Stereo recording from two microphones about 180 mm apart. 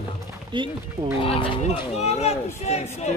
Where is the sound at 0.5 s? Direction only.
25° right (ahead or behind).